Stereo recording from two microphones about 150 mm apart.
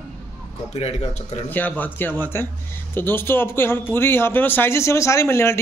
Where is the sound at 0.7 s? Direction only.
45° left (ahead or behind).